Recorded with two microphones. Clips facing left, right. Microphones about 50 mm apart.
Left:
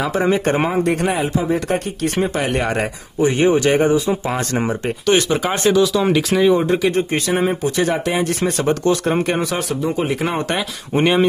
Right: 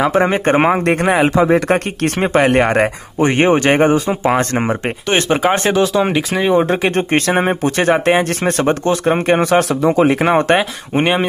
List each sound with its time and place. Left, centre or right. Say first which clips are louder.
0.0 s speech: right 4 dB; right
1.1 s speech: right 7 dB; right
6.6 s speech: right 2 dB; right
10.5 s speech: right 6 dB; right